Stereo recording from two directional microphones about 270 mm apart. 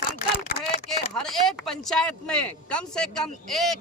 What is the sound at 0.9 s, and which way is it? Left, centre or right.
Speech, centre.